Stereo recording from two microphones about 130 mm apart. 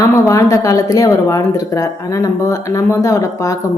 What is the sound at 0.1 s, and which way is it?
Speech, 25° left (ahead or behind).